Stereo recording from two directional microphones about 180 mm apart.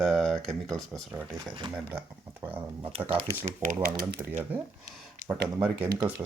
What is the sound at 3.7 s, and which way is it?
Speech, 15° right (ahead or behind).